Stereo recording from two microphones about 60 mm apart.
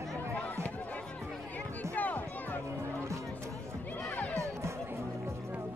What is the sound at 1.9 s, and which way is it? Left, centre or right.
Music, left.